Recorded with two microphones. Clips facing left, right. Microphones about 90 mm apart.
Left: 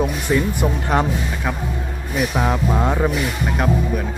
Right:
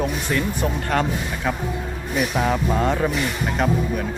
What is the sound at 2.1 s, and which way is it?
Speech, 5° left (ahead or behind).